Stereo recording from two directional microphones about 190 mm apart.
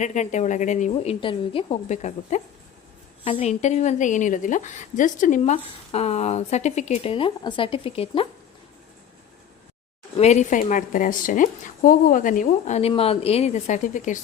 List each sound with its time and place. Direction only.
0.0 s a woman's voice: 40° left (ahead or behind)
1.2 s a woman's voice: 30° left (ahead or behind)
10.2 s a woman's voice: 35° left (ahead or behind)